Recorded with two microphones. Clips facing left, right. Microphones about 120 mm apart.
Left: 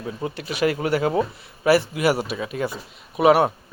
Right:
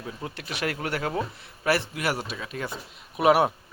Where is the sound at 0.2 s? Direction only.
5° left (ahead or behind).